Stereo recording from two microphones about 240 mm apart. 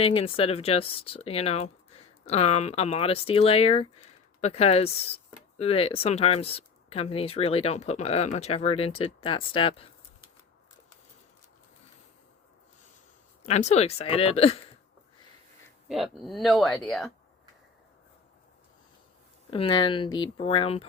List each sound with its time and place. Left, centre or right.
0.0 s speech: left
13.4 s speech: left
15.9 s speech: centre
19.5 s speech: left